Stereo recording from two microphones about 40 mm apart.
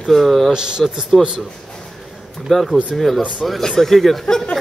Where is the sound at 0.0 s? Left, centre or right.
Centre.